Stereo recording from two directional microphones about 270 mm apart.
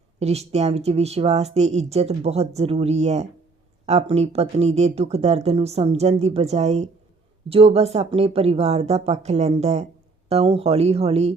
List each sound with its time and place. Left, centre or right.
0.2 s speech: right